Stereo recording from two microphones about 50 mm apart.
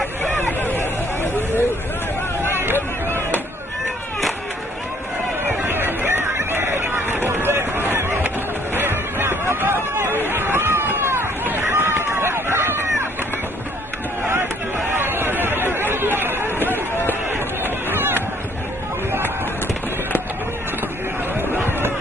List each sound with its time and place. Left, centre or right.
0.0 s hubbub: left
2.5 s hubbub: right
3.1 s chop: left
5.7 s hubbub: right
11.4 s run: right
14.9 s chatter: right
16.6 s a sound: left
17.3 s a sound: right
21.4 s hubbub: right